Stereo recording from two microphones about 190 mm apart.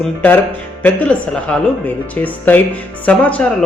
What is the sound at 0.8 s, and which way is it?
Speech, 5° left (ahead or behind).